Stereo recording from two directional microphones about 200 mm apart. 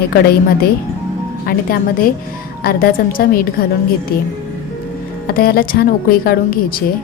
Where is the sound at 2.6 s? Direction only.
50° left (ahead or behind).